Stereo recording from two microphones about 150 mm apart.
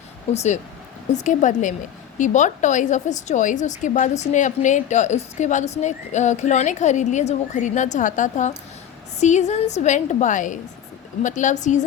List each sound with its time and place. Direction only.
0.3 s a woman's voice: 50° left (ahead or behind)